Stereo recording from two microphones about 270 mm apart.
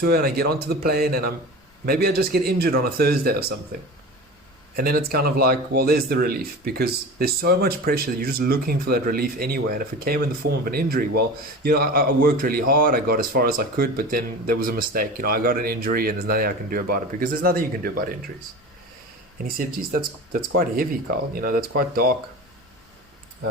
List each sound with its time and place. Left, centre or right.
0.0 s speech: right
4.8 s speech: right
19.5 s speech: right